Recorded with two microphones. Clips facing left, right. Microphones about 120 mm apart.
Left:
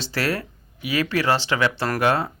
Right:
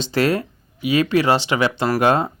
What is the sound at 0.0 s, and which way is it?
Speech, 20° right (ahead or behind).